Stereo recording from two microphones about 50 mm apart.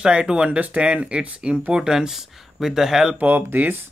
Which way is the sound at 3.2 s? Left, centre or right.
Right.